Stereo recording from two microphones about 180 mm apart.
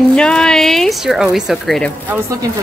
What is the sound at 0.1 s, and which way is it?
A woman's voice, 5° left (ahead or behind).